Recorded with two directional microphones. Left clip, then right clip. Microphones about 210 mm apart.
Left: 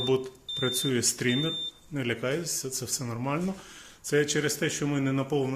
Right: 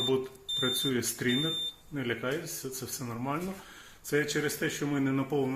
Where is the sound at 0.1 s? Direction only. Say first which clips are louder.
Left 2 dB; 60° left (ahead or behind).